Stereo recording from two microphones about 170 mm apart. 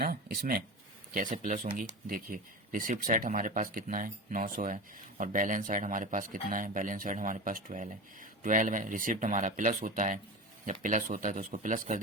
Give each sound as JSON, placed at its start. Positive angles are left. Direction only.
{"t": 0.0, "sound": "speech", "side_deg": -65}
{"t": 1.1, "sound": "speech", "side_deg": -50}